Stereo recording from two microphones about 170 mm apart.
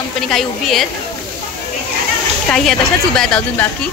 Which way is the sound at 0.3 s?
Centre (ahead or behind).